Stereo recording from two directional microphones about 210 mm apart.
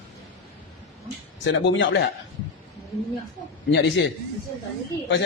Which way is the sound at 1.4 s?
60° left (ahead or behind).